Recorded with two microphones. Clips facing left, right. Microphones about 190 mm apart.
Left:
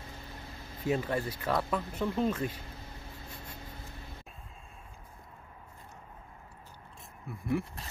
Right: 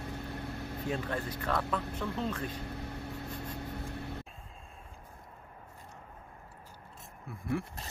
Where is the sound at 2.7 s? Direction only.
65° right (ahead or behind).